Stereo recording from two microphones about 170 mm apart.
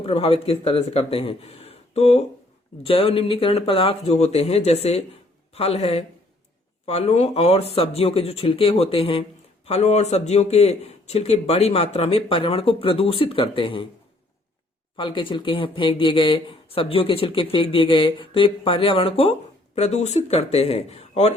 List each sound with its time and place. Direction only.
0.0 s speech: 35° left (ahead or behind)
14.9 s speech: 30° left (ahead or behind)